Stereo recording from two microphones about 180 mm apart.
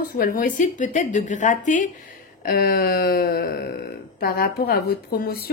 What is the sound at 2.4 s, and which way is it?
Speech, 60° left (ahead or behind).